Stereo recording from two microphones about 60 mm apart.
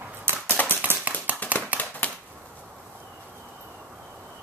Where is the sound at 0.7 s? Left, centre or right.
Right.